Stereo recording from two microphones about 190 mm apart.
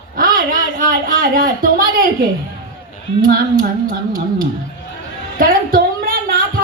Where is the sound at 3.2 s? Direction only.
50° right (ahead or behind).